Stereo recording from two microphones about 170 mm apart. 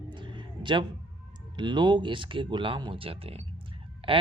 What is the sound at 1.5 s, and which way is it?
Speech, 25° right (ahead or behind).